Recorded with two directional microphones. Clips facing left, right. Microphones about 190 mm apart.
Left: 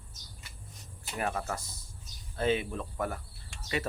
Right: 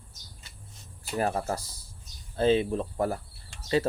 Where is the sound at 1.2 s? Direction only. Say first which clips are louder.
Right 5 dB; 35° right (ahead or behind).